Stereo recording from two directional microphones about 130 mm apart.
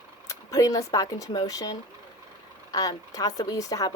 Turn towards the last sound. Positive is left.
turn(degrees=25)  # may be behind; listen again after turning